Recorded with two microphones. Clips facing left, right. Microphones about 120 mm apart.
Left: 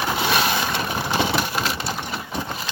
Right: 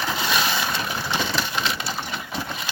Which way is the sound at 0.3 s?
55° left (ahead or behind).